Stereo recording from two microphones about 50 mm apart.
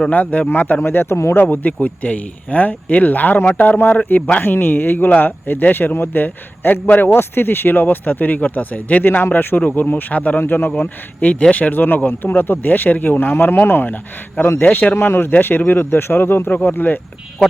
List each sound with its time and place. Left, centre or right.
0.1 s speech: left
0.8 s speech: left
1.4 s speech: left
4.4 s speech: left
10.4 s speech: left
10.8 s speech: left
14.9 s speech: left
15.3 s speech: left